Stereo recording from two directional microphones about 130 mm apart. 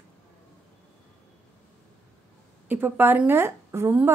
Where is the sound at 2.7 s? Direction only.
15° right (ahead or behind).